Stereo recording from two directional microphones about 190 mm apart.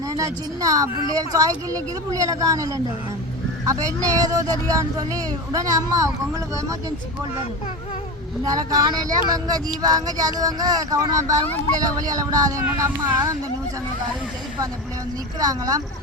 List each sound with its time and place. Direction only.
0.1 s speech: 20° right (ahead or behind)
8.4 s speech: 20° right (ahead or behind)
15.4 s speech: 20° right (ahead or behind)